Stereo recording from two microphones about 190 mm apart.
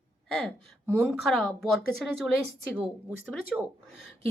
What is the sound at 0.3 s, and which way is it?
Speech, 5° left (ahead or behind).